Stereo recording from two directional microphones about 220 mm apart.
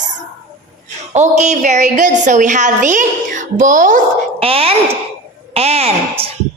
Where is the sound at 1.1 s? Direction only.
30° right (ahead or behind).